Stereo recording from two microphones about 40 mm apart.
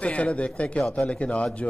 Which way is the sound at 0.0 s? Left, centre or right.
Left.